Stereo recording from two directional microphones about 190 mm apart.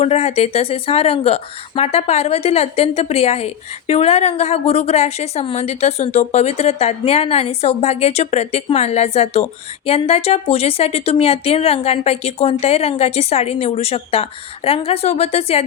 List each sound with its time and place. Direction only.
0.0 s speech: 35° left (ahead or behind)